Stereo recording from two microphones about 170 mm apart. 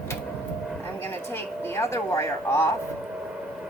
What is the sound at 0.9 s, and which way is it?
Speech, 10° left (ahead or behind).